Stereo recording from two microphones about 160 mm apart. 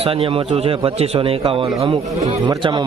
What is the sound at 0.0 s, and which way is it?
A man's voice, 35° right (ahead or behind).